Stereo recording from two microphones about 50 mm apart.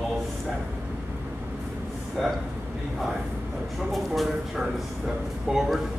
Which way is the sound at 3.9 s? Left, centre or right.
Centre.